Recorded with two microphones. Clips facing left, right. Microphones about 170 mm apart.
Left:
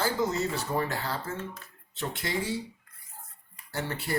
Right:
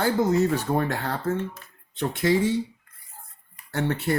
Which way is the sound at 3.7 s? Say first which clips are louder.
Right 7 dB; 60° right (ahead or behind).